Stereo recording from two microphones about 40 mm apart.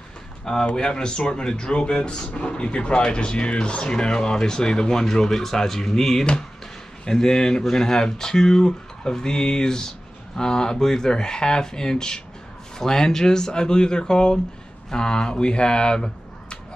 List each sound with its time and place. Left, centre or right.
0.7 s speech: centre